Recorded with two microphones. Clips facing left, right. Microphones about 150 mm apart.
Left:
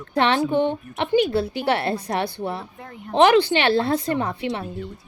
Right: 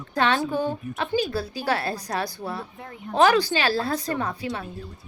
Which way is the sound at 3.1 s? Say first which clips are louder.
Left 4 dB; 25° left (ahead or behind).